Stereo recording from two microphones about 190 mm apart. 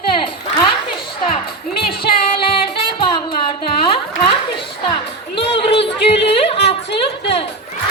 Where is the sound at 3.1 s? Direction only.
25° left (ahead or behind).